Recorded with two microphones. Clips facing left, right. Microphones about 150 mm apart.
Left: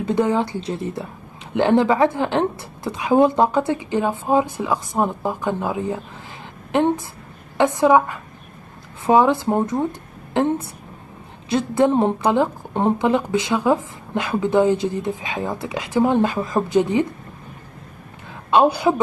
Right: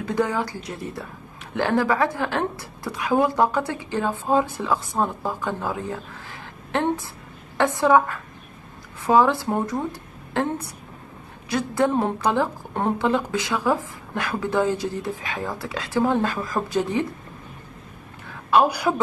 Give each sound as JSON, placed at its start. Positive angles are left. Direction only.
{"t": 0.0, "sound": "a woman's voice", "side_deg": 25}
{"t": 7.5, "sound": "a woman's voice", "side_deg": 15}
{"t": 18.5, "sound": "a woman's voice", "side_deg": 25}